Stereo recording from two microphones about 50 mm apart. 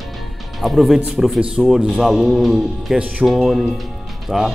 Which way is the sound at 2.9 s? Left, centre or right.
Right.